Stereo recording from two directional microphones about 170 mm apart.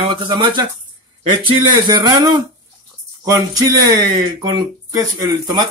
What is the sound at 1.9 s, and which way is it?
Speech, 25° right (ahead or behind).